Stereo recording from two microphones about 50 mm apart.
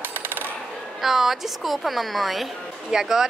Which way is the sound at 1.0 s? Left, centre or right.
Centre.